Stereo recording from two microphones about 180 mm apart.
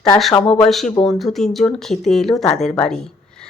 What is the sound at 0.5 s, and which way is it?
Speech, centre (ahead or behind).